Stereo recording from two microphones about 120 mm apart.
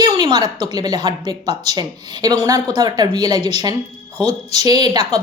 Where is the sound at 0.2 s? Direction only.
35° right (ahead or behind).